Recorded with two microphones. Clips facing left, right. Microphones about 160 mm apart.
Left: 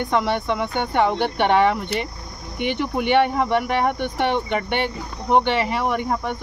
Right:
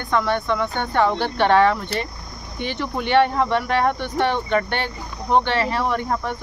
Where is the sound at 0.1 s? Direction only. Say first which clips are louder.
Right 3 dB; 20° left (ahead or behind).